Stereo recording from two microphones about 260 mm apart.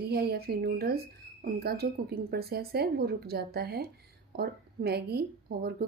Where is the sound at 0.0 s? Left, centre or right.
Right.